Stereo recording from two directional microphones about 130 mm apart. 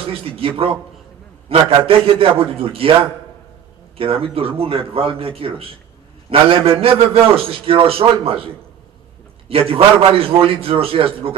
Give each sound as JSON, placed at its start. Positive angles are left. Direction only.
{"t": 0.0, "sound": "a man's voice", "side_deg": -45}
{"t": 9.5, "sound": "a man's voice", "side_deg": -45}